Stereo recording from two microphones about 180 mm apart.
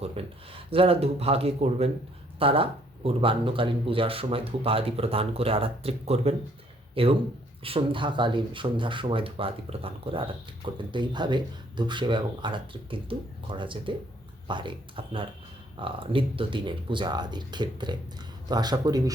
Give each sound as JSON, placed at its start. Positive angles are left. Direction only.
{"t": 0.2, "sound": "speech", "side_deg": -35}